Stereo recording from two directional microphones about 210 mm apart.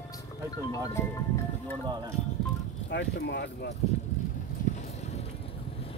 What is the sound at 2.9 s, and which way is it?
Speech, 55° left (ahead or behind).